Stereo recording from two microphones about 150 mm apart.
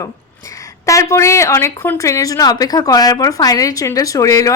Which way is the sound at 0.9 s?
20° left (ahead or behind).